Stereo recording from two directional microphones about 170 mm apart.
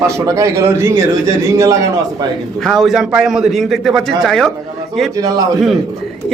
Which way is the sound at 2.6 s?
Centre (ahead or behind).